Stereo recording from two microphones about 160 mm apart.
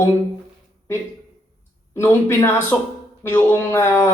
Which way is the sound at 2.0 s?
15° left (ahead or behind).